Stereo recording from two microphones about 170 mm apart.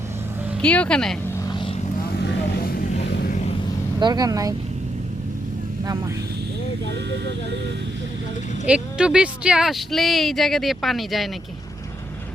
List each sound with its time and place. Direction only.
0.6 s speech: 5° left (ahead or behind)
1.5 s vehicle: 30° left (ahead or behind)
2.6 s vehicle: 60° left (ahead or behind)
4.0 s speech: 25° right (ahead or behind)
8.6 s speech: 5° right (ahead or behind)